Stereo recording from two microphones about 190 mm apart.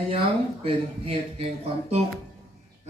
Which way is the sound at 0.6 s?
30° right (ahead or behind).